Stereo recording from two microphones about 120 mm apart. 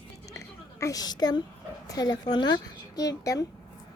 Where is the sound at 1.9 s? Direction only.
35° left (ahead or behind).